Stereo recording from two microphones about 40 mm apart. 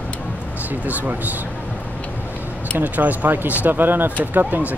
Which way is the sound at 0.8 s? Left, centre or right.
Right.